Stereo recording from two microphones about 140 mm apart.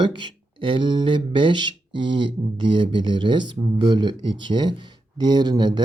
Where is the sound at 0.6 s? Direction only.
35° right (ahead or behind).